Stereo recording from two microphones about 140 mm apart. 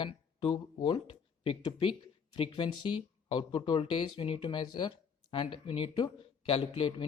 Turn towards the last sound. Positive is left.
turn(degrees=40)  # may be behind; listen again after turning